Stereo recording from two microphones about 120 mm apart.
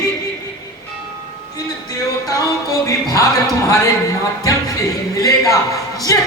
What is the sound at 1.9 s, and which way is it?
Music, 30° left (ahead or behind).